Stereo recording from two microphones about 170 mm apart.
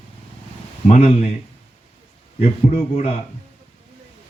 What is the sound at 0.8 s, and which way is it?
Speech, 40° left (ahead or behind).